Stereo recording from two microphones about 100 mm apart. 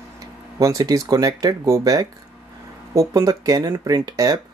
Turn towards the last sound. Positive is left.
turn(degrees=-40)  # may be behind; listen again after turning